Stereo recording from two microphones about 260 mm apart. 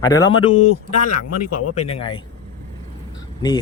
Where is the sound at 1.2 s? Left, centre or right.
Left.